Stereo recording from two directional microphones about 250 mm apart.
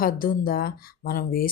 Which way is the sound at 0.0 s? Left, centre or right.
Left.